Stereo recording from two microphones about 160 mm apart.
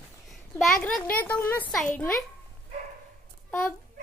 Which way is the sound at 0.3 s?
Centre (ahead or behind).